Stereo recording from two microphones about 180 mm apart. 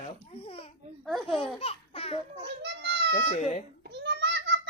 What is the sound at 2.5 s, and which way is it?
Children playing, 70° right (ahead or behind).